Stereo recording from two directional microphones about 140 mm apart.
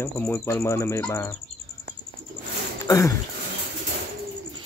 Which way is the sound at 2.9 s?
25° left (ahead or behind).